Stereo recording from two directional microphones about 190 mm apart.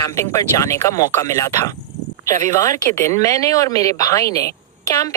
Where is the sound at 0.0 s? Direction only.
15° left (ahead or behind).